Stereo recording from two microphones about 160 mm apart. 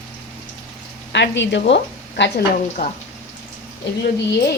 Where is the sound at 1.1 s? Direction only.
90° left.